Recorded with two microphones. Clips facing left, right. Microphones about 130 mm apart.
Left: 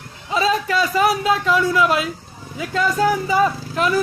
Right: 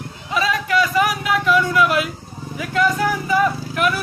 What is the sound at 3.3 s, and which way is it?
Speech, 25° left (ahead or behind).